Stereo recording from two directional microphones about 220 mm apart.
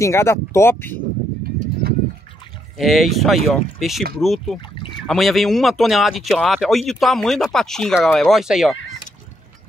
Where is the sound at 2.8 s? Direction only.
Centre (ahead or behind).